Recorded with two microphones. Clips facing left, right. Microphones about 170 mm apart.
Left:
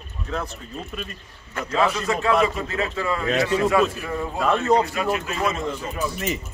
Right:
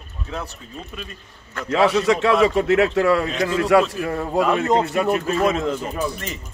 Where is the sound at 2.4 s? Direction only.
80° right.